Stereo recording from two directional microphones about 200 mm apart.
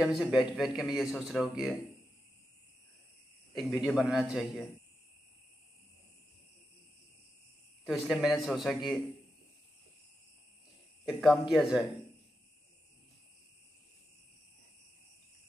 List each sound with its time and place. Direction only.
0.0 s speech: centre (ahead or behind)
3.5 s speech: centre (ahead or behind)
7.8 s speech: centre (ahead or behind)
11.1 s speech: centre (ahead or behind)